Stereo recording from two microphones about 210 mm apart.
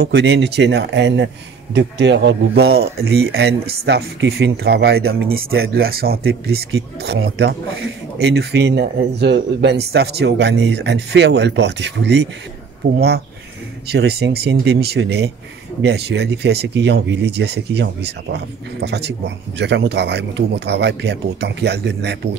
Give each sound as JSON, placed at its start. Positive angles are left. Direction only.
{"t": 0.0, "sound": "speech", "side_deg": -55}